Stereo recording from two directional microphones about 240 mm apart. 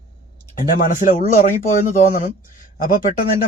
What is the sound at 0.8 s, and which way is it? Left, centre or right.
A man's voice, left.